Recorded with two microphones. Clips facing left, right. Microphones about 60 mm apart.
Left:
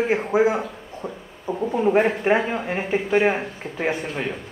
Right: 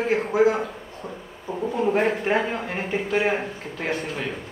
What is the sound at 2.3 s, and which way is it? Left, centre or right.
A man's voice, centre.